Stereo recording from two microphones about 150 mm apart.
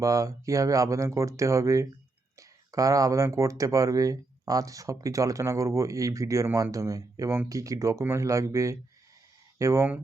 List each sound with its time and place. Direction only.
0.0 s speech: 20° right (ahead or behind)